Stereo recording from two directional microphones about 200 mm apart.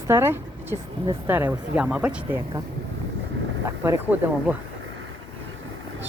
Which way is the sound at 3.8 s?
10° right (ahead or behind).